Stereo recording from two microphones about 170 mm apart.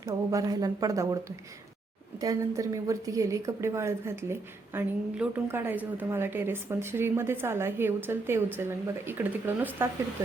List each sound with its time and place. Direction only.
0.0 s a woman's voice: 20° right (ahead or behind)
2.2 s a woman's voice: 20° right (ahead or behind)